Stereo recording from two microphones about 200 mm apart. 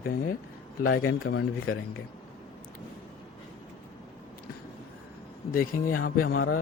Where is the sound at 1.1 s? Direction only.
55° left (ahead or behind).